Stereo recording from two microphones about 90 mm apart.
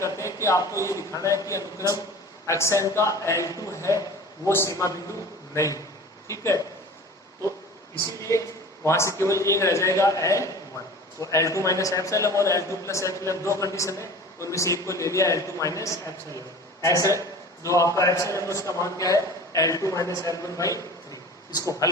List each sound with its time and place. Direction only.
0.0 s a sound: 35° left (ahead or behind)
0.4 s a man's voice: 40° left (ahead or behind)
8.2 s a man's voice: 35° left (ahead or behind)